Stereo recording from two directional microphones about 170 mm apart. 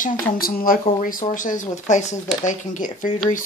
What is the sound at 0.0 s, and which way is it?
Speech, 60° left (ahead or behind).